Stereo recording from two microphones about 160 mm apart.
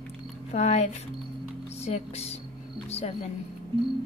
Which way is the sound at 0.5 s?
45° left (ahead or behind).